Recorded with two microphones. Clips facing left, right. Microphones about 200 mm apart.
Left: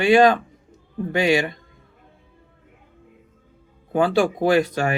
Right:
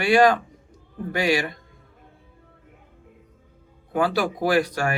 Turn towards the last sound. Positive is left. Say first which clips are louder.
# left 3 dB
turn(degrees=20)  # may be behind; listen again after turning